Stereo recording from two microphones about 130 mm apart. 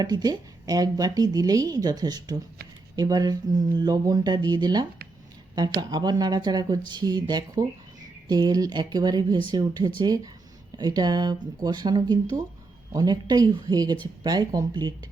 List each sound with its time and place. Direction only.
0.0 s speech: 30° right (ahead or behind)